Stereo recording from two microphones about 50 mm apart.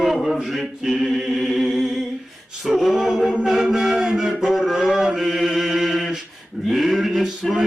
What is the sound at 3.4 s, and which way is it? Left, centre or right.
Music, centre.